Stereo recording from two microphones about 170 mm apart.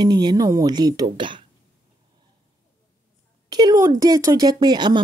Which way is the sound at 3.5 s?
20° right (ahead or behind).